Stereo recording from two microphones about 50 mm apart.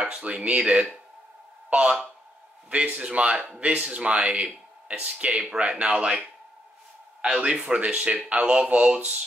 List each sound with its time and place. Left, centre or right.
0.0 s speech: right